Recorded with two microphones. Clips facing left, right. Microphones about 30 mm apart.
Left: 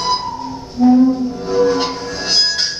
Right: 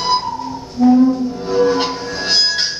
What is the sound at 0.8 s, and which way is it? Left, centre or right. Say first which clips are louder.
Music: even; right.